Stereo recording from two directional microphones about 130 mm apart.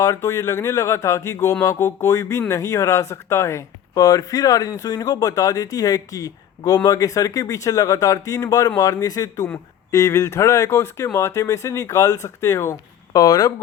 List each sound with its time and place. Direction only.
0.0 s speech: 25° left (ahead or behind)